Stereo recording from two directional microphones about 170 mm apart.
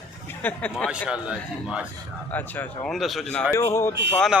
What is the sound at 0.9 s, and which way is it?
Speech, 5° right (ahead or behind).